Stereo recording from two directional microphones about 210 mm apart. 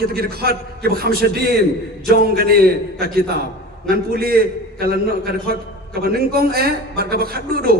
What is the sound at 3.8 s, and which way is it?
A man's voice, 45° right (ahead or behind).